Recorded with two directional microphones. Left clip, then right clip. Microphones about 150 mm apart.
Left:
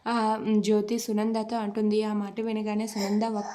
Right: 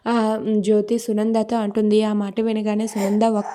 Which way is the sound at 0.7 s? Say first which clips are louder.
Right 9 dB; 35° right (ahead or behind).